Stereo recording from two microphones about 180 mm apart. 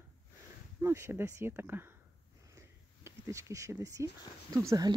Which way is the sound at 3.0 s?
15° right (ahead or behind).